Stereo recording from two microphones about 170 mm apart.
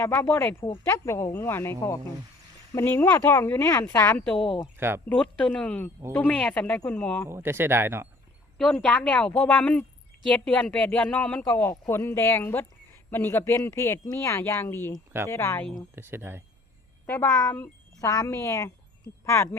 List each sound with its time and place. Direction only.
0.0 s speech: 15° left (ahead or behind)
2.7 s speech: 15° left (ahead or behind)
4.6 s speech: 15° right (ahead or behind)
5.0 s speech: 10° left (ahead or behind)
7.3 s speech: 15° right (ahead or behind)
8.5 s speech: 5° left (ahead or behind)
16.0 s speech: 15° right (ahead or behind)
17.1 s speech: 15° left (ahead or behind)